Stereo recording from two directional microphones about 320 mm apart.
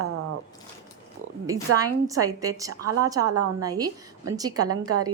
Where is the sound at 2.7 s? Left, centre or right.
Right.